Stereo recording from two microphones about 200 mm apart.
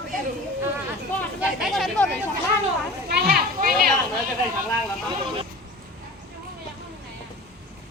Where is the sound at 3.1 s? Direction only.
55° right (ahead or behind).